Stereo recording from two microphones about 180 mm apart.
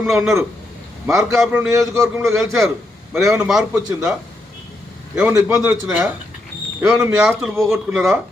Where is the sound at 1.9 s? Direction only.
15° right (ahead or behind).